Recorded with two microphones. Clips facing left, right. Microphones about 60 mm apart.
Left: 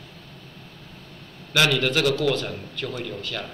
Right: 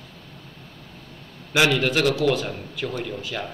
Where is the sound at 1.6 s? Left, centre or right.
Centre.